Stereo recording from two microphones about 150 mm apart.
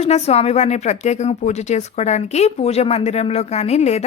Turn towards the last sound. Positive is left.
turn(degrees=45)  # may be behind; listen again after turning